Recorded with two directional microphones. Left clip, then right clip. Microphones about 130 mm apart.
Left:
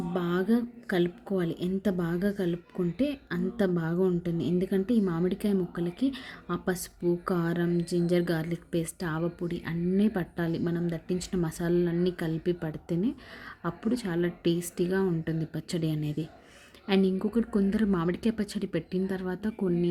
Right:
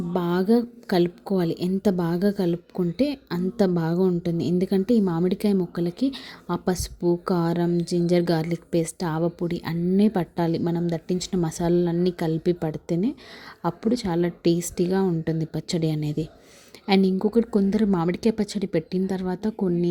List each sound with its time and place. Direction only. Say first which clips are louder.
0.1 s a woman's voice: right 7 dB; 30° right (ahead or behind)